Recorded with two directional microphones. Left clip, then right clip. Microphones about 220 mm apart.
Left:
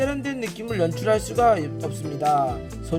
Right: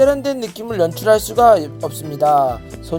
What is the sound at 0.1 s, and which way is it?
Speech, 15° right (ahead or behind).